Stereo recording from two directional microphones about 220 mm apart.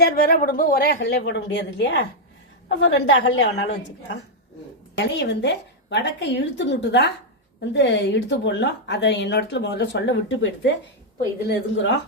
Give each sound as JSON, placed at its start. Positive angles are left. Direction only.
{"t": 0.0, "sound": "speech", "side_deg": 40}
{"t": 0.9, "sound": "a woman's voice", "side_deg": 55}